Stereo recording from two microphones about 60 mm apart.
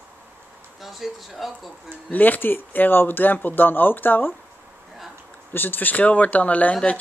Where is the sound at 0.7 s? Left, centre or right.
Centre.